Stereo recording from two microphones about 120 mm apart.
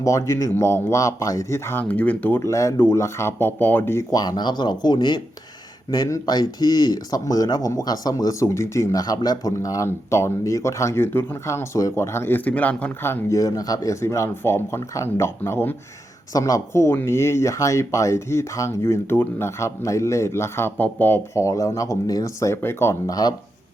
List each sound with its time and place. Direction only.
0.0 s speech: 25° left (ahead or behind)
2.4 s speech: 25° left (ahead or behind)
4.1 s speech: 35° left (ahead or behind)